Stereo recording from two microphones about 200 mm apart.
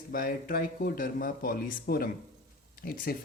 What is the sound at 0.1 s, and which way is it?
Speech, 45° left (ahead or behind).